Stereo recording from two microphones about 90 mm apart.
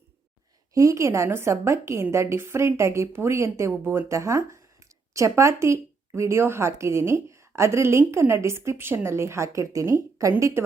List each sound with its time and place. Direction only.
0.7 s a woman's voice: 35° right (ahead or behind)